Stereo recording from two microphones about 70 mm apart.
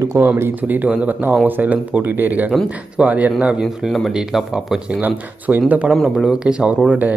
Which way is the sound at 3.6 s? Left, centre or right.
Centre.